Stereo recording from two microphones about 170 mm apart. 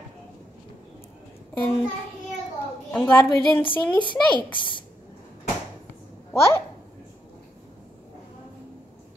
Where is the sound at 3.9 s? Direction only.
30° left (ahead or behind).